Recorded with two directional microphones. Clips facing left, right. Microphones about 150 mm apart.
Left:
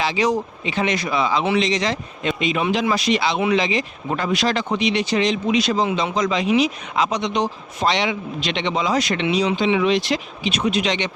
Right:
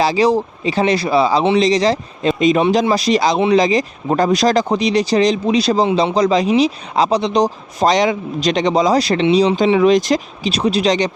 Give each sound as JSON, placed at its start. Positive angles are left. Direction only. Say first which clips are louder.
{"t": 0.0, "sound": "speech", "louder": "right 6 dB", "side_deg": -35}